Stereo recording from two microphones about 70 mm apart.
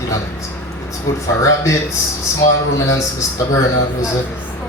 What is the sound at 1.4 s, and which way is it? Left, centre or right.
Speech, left.